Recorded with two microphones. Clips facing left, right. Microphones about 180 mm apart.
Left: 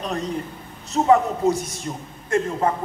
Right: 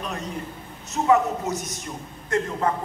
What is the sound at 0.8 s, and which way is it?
A man's voice, 35° left (ahead or behind).